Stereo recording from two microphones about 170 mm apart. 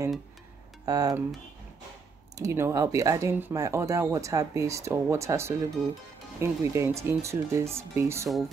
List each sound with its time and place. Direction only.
0.8 s speech: 20° right (ahead or behind)
2.3 s speech: 15° right (ahead or behind)